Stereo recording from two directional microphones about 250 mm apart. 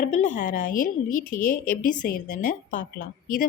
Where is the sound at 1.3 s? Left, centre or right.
Left.